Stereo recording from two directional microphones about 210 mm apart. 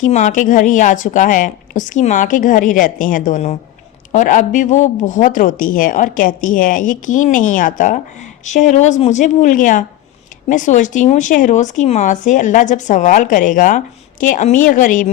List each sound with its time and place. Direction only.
0.0 s speech: 35° left (ahead or behind)